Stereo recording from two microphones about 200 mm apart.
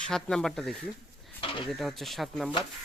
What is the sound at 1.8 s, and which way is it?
Speech, centre (ahead or behind).